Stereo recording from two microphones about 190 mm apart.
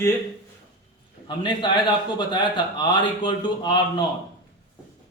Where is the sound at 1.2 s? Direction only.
25° left (ahead or behind).